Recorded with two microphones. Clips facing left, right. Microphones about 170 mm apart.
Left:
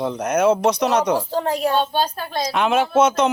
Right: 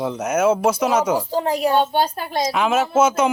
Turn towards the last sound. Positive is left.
turn(degrees=-5)  # may be behind; listen again after turning